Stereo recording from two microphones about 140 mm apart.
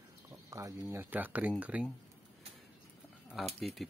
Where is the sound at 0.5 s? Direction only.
20° right (ahead or behind).